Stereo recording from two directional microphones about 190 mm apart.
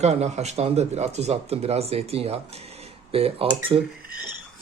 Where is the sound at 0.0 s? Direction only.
35° right (ahead or behind).